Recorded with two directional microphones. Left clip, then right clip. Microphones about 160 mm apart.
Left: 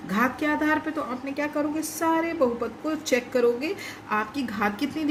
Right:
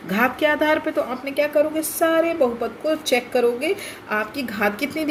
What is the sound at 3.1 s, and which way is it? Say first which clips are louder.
A woman's voice: right 1 dB; 20° right (ahead or behind).